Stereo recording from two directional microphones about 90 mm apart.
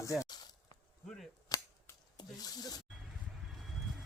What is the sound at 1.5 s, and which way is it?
Cap gun, 40° left (ahead or behind).